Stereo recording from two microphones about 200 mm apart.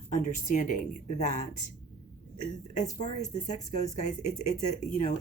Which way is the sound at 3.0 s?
35° left (ahead or behind).